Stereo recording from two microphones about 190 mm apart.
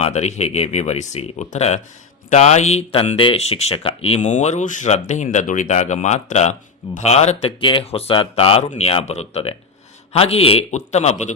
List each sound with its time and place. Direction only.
0.0 s speech: 35° left (ahead or behind)